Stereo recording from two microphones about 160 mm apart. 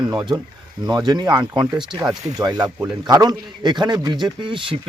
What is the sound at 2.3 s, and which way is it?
Speech, 25° right (ahead or behind).